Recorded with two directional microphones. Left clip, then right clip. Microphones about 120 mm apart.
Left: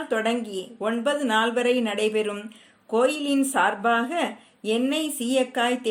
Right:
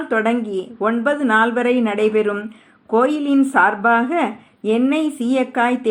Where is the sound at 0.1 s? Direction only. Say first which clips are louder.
Right 7 dB; 15° left (ahead or behind).